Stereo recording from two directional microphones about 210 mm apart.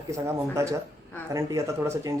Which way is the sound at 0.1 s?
15° right (ahead or behind).